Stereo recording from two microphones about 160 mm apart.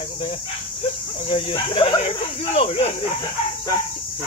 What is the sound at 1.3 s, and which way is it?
Speech, 35° left (ahead or behind).